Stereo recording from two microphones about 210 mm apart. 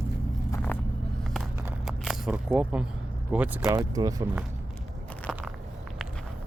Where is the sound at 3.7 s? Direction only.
15° right (ahead or behind).